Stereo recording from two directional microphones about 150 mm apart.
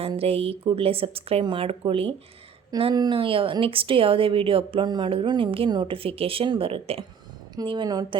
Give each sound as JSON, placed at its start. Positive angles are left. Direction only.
{"t": 0.2, "sound": "a woman's voice", "side_deg": -40}